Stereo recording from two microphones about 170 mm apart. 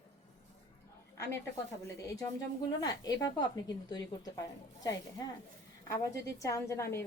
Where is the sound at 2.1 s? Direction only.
20° left (ahead or behind).